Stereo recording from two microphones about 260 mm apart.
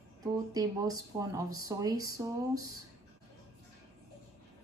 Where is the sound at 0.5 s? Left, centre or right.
Centre.